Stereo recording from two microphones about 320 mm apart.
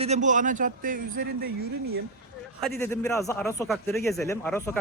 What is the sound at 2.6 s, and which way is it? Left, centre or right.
Speech, centre.